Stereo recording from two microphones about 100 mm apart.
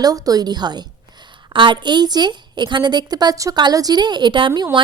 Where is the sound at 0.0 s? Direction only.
40° right (ahead or behind).